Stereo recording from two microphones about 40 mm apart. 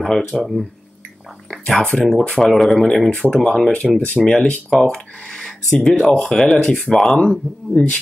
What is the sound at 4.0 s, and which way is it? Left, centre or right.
Speech, left.